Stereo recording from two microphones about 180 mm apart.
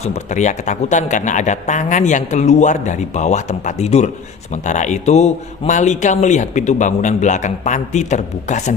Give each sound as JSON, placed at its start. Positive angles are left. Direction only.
{"t": 0.0, "sound": "speech", "side_deg": 40}